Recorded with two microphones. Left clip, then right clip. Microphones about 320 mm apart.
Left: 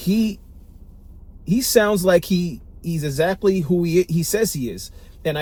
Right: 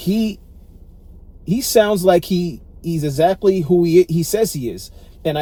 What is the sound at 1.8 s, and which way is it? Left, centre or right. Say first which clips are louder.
Speech: right 4 dB; right.